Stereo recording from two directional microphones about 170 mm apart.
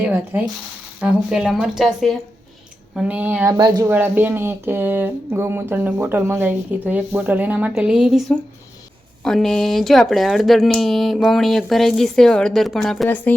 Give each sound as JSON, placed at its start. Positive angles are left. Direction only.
{"t": 0.0, "sound": "speech", "side_deg": -10}